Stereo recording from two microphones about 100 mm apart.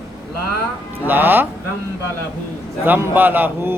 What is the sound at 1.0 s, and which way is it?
Speech, 20° right (ahead or behind).